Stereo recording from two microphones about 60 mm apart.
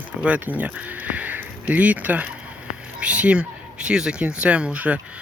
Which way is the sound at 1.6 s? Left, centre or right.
Right.